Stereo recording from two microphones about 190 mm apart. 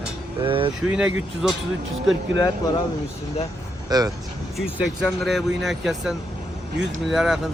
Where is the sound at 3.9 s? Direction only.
20° right (ahead or behind).